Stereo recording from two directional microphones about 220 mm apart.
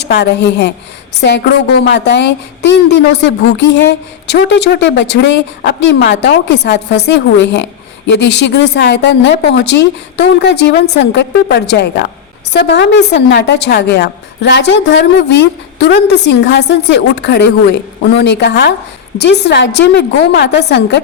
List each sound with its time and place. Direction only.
0.0 s a woman's voice: 50° left (ahead or behind)
1.8 s a woman's voice: 50° left (ahead or behind)